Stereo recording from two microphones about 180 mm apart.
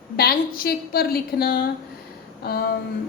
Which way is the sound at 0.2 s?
55° left (ahead or behind).